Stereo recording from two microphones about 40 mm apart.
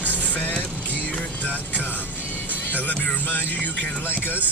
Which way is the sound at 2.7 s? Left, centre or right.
Left.